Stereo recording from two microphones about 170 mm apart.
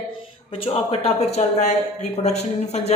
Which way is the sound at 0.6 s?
35° left (ahead or behind).